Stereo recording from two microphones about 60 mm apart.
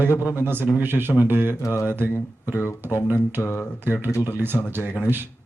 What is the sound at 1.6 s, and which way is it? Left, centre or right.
Mantra, left.